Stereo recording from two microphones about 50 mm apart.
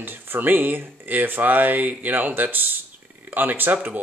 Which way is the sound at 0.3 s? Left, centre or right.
Right.